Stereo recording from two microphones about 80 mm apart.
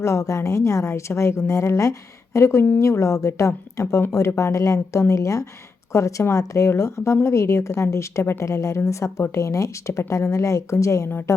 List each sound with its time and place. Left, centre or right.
0.0 s speech: left